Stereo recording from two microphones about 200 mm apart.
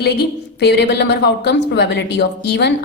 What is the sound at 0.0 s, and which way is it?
A woman's voice, 55° left (ahead or behind).